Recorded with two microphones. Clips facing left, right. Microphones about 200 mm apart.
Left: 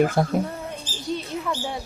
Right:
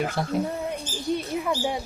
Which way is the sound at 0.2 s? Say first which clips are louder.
Left 6 dB; 50° left (ahead or behind).